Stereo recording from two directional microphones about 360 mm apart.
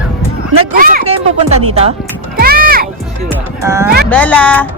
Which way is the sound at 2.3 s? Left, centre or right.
Right.